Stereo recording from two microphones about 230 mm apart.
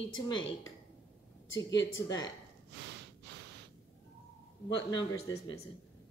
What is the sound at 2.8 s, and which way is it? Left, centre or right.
Snort, right.